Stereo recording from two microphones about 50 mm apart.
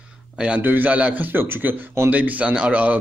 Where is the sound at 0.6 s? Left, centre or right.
Right.